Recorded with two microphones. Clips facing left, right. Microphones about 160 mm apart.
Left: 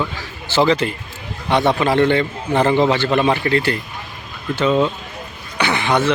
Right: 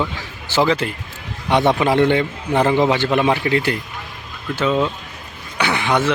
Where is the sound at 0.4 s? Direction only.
10° right (ahead or behind).